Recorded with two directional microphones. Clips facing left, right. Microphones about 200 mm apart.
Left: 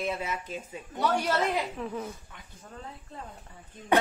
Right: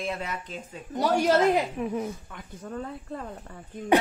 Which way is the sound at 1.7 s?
15° right (ahead or behind).